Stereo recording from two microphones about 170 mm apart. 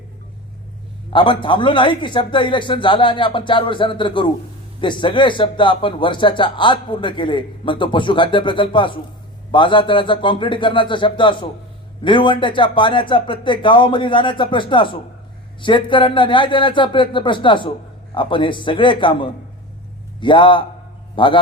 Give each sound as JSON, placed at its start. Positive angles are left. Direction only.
{"t": 1.1, "sound": "speech", "side_deg": 30}